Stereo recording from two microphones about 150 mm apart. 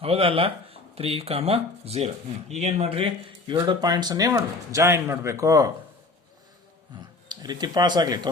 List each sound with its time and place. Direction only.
0.0 s speech: 40° right (ahead or behind); by 5.7 s 20° right (ahead or behind)
7.3 s speech: 30° right (ahead or behind)